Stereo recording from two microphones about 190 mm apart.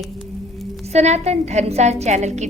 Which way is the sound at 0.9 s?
35° right (ahead or behind).